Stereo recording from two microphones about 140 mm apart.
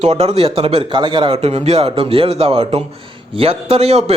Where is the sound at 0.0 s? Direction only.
50° right (ahead or behind).